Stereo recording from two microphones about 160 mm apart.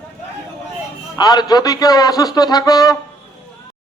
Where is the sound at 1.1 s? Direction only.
25° left (ahead or behind).